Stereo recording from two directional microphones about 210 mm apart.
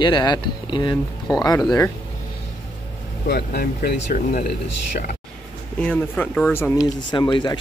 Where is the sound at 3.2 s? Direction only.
50° left (ahead or behind).